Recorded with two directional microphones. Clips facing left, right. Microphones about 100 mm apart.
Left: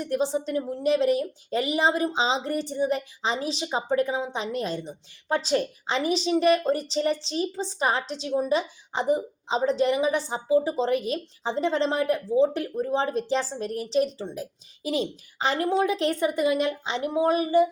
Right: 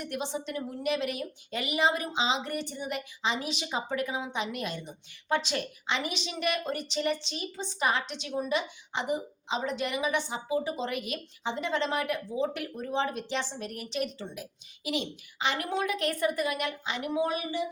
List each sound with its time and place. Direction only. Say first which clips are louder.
0.0 s a woman's voice: left 8 dB; 35° left (ahead or behind)